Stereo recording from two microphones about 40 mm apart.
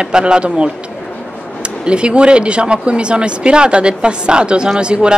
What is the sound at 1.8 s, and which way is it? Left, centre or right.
Speech, right.